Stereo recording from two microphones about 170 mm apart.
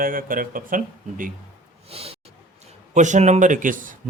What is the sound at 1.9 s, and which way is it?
Speech, 35° right (ahead or behind).